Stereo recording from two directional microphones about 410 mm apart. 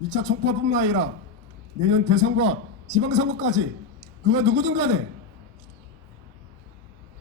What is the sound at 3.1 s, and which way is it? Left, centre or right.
A man's voice, centre.